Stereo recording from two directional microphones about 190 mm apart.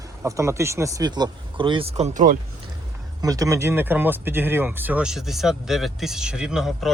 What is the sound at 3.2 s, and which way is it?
Speech, 15° right (ahead or behind).